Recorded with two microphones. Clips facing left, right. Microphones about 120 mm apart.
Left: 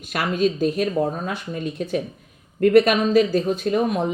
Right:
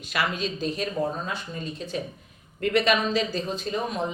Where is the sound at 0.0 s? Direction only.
50° left (ahead or behind).